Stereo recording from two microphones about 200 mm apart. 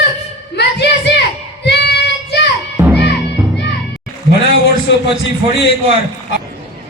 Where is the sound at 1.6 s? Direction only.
55° left (ahead or behind).